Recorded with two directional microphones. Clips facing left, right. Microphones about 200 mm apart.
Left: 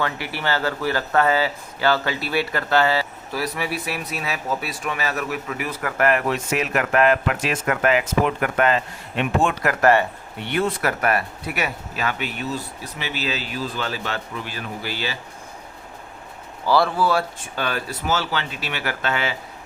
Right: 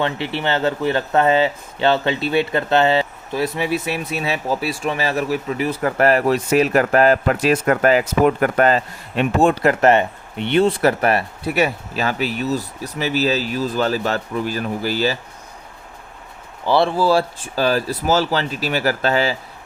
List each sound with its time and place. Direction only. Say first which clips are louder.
0.0 s speech: right 4 dB; 25° right (ahead or behind); by 15.2 s 40° right (ahead or behind)
16.6 s speech: right 3 dB; 25° right (ahead or behind)